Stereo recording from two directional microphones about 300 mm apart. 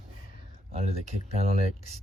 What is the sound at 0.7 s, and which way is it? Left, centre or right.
Speech, right.